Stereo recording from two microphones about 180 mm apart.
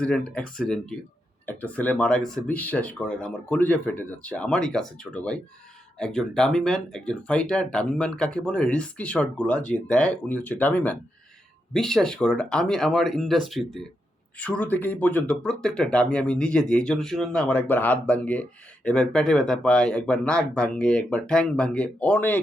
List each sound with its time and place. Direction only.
0.0 s speech: 5° left (ahead or behind)